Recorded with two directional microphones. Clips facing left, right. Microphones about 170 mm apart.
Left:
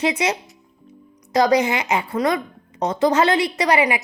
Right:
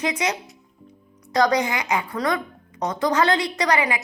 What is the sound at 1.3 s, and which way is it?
A woman's voice, 20° left (ahead or behind).